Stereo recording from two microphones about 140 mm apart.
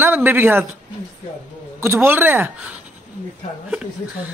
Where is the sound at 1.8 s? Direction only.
15° right (ahead or behind).